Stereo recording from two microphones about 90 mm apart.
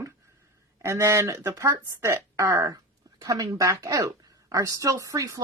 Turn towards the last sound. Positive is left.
turn(degrees=-40)  # may be behind; listen again after turning